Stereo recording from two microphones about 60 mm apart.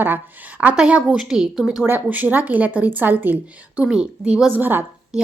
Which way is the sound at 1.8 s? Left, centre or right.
Right.